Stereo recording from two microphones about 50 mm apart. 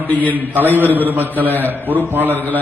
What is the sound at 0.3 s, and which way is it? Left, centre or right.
A man's voice, right.